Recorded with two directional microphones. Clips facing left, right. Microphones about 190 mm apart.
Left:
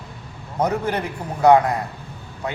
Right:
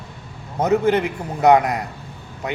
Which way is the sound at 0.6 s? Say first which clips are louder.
Right 5 dB; 25° right (ahead or behind).